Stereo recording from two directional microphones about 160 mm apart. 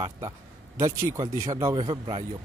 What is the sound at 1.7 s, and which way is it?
Speech, 35° right (ahead or behind).